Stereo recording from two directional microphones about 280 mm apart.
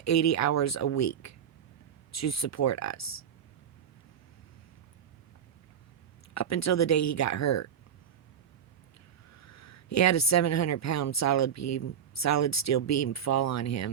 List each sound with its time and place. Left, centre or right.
0.0 s speech: left
6.3 s speech: left
9.3 s speech: left